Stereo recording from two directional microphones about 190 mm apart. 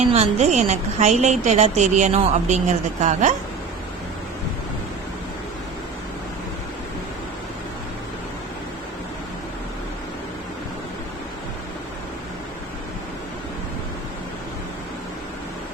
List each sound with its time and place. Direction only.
0.1 s a woman's voice: 35° right (ahead or behind)